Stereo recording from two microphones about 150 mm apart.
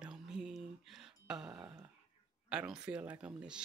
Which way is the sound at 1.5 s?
25° right (ahead or behind).